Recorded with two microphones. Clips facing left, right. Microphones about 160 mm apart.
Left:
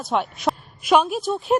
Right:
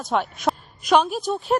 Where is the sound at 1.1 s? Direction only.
Centre (ahead or behind).